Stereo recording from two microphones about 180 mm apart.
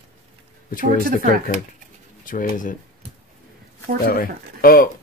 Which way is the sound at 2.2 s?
50° left (ahead or behind).